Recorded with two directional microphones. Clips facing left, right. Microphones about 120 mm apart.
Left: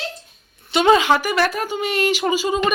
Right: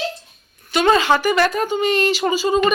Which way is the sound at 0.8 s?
10° left (ahead or behind).